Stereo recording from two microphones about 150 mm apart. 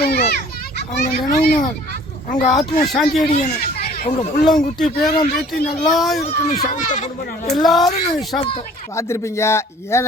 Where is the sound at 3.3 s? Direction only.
80° left.